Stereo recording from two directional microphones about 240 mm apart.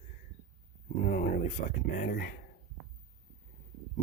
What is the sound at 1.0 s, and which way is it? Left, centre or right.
Speech, left.